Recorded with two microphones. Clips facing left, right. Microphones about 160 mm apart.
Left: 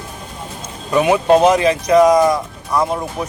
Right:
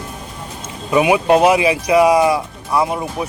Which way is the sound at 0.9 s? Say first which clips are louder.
Even; 10° right (ahead or behind).